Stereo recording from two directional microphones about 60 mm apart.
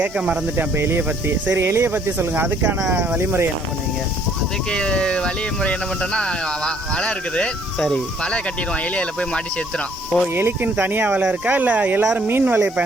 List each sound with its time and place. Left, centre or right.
0.0 s speech: centre
0.5 s speech: right
4.7 s speech: centre
10.3 s speech: right